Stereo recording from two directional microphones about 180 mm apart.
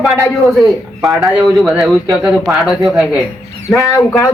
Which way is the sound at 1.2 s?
Centre (ahead or behind).